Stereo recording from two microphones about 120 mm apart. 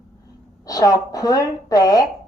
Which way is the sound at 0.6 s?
30° left (ahead or behind).